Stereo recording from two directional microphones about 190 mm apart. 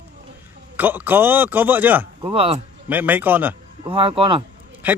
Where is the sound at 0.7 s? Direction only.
10° right (ahead or behind).